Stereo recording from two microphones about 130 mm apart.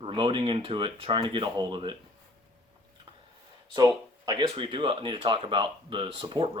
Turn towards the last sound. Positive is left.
turn(degrees=-40)  # may be behind; listen again after turning